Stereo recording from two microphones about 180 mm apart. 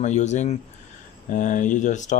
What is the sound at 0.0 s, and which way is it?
Speech, 40° left (ahead or behind).